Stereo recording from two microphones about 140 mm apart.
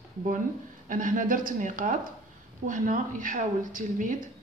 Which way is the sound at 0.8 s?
70° right (ahead or behind).